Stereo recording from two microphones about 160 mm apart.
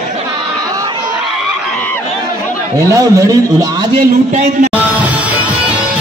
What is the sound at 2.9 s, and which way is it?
Speech, 25° right (ahead or behind).